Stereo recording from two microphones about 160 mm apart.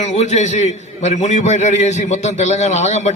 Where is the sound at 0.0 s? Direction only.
45° left (ahead or behind).